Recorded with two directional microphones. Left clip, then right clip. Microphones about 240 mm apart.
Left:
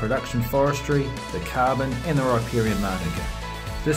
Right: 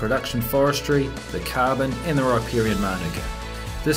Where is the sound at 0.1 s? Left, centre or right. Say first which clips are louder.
Right 1 dB; right.